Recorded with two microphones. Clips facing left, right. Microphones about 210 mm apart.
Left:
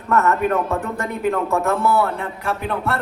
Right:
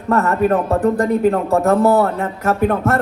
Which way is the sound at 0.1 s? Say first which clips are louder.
Right 3 dB; 35° right (ahead or behind).